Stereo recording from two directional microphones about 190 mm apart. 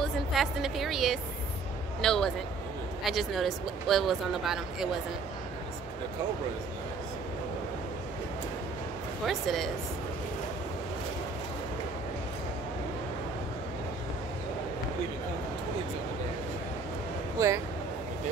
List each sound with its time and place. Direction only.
0.0 s a woman's voice: centre (ahead or behind)
9.2 s speech: centre (ahead or behind)
17.4 s speech: 15° right (ahead or behind)